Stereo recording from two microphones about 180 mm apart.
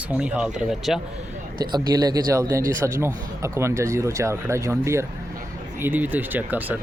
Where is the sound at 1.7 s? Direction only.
20° right (ahead or behind).